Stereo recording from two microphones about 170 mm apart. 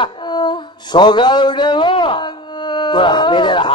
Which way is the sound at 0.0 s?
25° left (ahead or behind).